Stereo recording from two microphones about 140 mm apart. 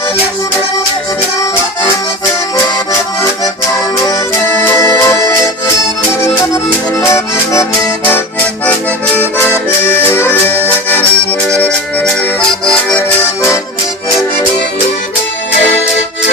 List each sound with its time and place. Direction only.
3.9 s music: 25° left (ahead or behind)
7.0 s accordion: 20° left (ahead or behind)
9.4 s accordion: 15° left (ahead or behind)